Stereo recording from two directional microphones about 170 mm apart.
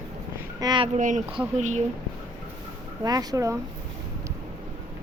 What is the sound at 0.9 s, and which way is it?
Speech, 50° right (ahead or behind).